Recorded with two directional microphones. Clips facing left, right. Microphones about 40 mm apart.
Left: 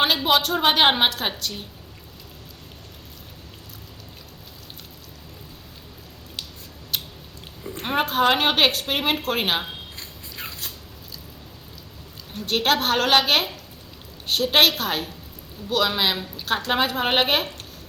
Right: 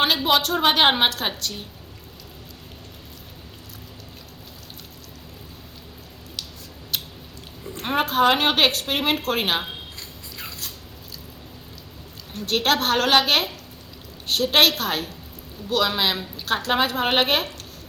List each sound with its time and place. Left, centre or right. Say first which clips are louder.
0.0 s a woman's voice: even; centre
6.9 s biting: even; centre
7.6 s a woman's voice: even; centre
10.3 s cat: left 1 dB; left
12.3 s a woman's voice: even; centre